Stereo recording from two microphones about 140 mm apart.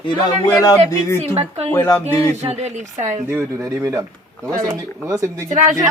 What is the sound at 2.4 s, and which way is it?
Speech, 55° right (ahead or behind).